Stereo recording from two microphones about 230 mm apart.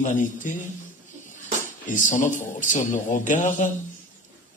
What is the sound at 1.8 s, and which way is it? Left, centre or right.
Speech, left.